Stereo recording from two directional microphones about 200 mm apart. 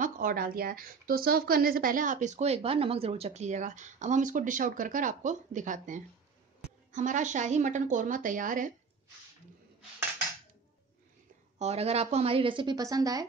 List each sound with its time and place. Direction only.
0.0 s speech: 45° right (ahead or behind)
11.5 s a woman's voice: 30° right (ahead or behind)